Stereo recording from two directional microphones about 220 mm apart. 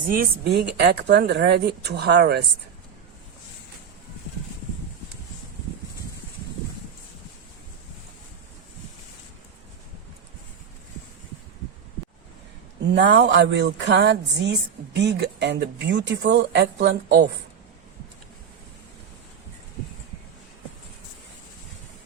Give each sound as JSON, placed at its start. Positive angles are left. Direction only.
{"t": 0.1, "sound": "speech", "side_deg": -45}
{"t": 12.9, "sound": "speech", "side_deg": -50}